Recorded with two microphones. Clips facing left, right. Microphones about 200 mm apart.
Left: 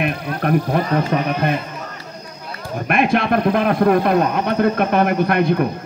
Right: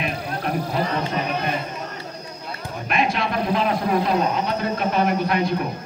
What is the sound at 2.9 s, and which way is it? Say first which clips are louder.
Speech: left 6 dB; 55° left (ahead or behind).